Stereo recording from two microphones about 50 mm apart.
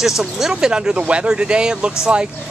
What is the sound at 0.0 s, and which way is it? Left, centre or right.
Speech, centre.